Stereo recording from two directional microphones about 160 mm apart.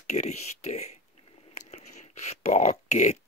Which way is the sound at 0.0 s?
45° left (ahead or behind).